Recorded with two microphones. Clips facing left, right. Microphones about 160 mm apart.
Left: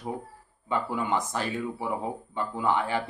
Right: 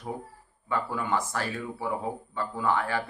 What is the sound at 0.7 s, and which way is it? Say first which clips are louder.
Speech: left 1 dB; 20° left (ahead or behind).